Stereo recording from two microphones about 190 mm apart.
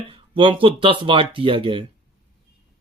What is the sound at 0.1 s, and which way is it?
Speech, 25° right (ahead or behind).